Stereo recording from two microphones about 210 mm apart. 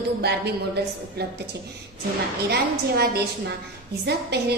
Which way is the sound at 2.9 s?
50° right (ahead or behind).